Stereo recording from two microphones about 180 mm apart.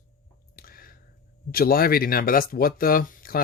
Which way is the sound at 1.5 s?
55° left (ahead or behind).